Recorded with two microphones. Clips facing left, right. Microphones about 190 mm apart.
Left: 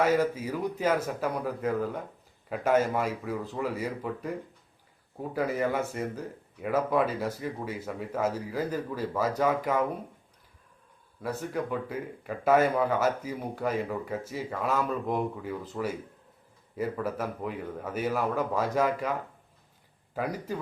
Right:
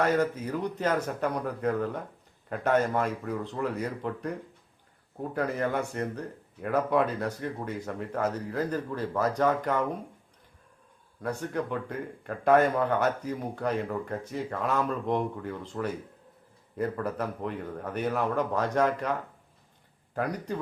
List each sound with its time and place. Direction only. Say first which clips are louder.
0.0 s a man's voice: left 1 dB; 5° left (ahead or behind)
11.2 s a man's voice: right 1 dB; 5° left (ahead or behind)
20.1 s a man's voice: right 1 dB; 5° left (ahead or behind)